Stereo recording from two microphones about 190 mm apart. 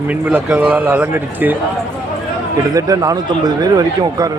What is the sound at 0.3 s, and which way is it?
A man's voice, 5° right (ahead or behind).